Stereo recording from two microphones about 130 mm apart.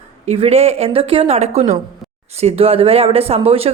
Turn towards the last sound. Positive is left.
turn(degrees=-50)  # may be behind; listen again after turning